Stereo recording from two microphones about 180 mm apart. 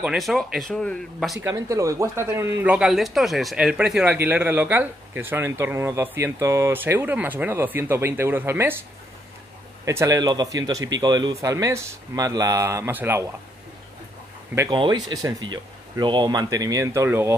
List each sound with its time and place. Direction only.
0.0 s speech: centre (ahead or behind)
1.4 s speech: 15° right (ahead or behind)
9.8 s speech: 15° right (ahead or behind)
14.7 s speech: 25° right (ahead or behind)